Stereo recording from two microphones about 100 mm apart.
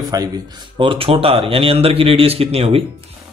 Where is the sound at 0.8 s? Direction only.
65° right (ahead or behind); by 2.8 s 85° right.